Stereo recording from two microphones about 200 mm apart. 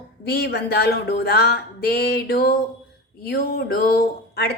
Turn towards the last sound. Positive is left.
turn(degrees=50)  # may be behind; listen again after turning